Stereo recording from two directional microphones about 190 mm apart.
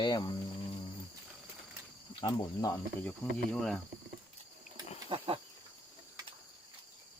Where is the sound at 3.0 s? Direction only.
5° left (ahead or behind).